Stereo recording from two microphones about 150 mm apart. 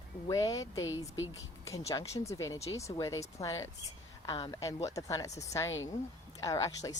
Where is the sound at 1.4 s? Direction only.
20° left (ahead or behind).